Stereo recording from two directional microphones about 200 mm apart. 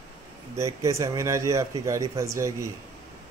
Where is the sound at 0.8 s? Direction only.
15° right (ahead or behind).